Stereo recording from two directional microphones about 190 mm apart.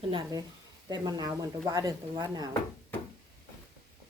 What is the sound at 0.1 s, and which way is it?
Speech, 20° right (ahead or behind).